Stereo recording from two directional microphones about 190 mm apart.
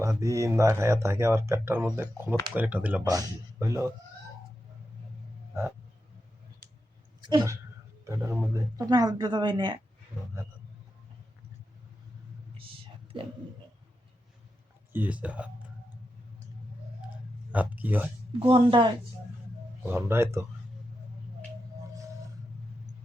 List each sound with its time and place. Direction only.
0.0 s speech: 15° right (ahead or behind)
7.2 s speech: 20° right (ahead or behind)
14.9 s speech: 10° right (ahead or behind)
17.5 s speech: 10° right (ahead or behind)
18.3 s speech: 30° right (ahead or behind)
19.8 s speech: 10° right (ahead or behind)